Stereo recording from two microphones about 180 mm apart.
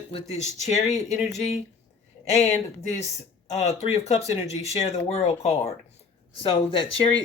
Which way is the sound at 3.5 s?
35° left (ahead or behind).